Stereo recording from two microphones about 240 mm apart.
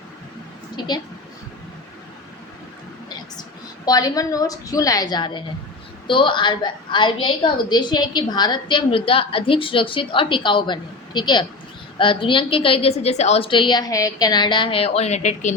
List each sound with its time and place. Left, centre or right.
0.8 s a woman's voice: centre
3.8 s a woman's voice: centre; by 15.5 s left